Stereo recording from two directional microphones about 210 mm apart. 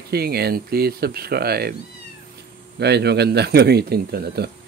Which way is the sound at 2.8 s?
50° right (ahead or behind).